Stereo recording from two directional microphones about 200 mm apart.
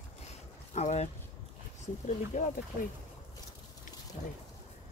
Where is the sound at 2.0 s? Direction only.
40° left (ahead or behind).